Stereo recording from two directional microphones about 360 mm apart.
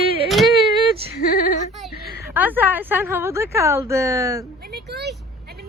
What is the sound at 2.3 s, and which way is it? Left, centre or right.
Speech, centre.